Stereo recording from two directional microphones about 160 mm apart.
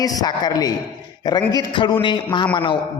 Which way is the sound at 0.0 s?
25° left (ahead or behind).